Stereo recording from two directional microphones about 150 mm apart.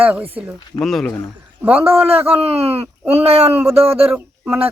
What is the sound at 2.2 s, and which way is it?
Speech, 40° right (ahead or behind).